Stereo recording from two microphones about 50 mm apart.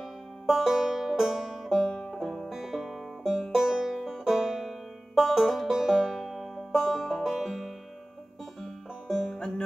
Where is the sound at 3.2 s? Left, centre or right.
Centre.